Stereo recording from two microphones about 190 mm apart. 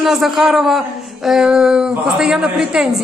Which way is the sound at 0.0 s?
Centre (ahead or behind).